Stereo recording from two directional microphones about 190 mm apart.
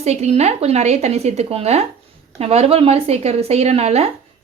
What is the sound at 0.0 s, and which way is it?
A woman's voice, 35° right (ahead or behind).